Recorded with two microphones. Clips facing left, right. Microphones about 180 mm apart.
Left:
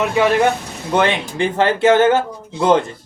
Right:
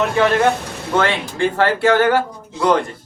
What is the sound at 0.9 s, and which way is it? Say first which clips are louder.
Speech: left 1 dB; 20° left (ahead or behind).